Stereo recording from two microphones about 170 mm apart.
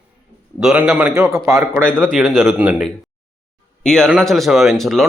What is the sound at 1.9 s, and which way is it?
Speech, 5° left (ahead or behind).